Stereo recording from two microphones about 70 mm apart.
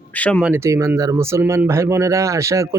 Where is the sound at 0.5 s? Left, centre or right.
Right.